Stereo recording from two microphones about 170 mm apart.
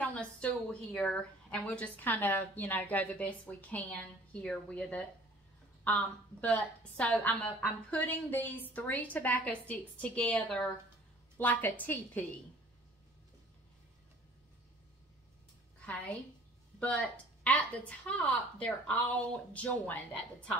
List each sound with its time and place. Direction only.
0.0 s a woman's voice: 5° left (ahead or behind)
15.8 s a woman's voice: 5° left (ahead or behind)